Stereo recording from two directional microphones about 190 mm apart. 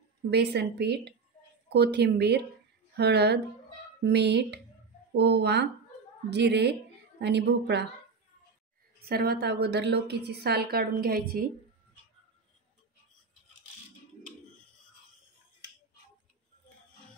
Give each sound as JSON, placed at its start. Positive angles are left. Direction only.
{"t": 0.3, "sound": "a woman's voice", "side_deg": -60}
{"t": 9.0, "sound": "a woman's voice", "side_deg": -55}